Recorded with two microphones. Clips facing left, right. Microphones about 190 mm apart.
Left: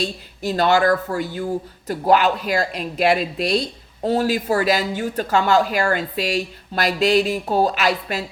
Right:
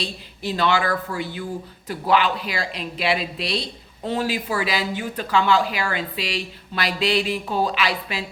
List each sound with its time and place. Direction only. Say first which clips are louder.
0.0 s speech: left 5 dB; 45° left (ahead or behind)